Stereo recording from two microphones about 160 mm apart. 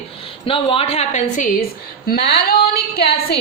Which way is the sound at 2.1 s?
80° left.